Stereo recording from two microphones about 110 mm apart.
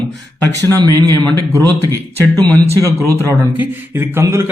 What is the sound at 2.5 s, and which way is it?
Speech, 25° left (ahead or behind).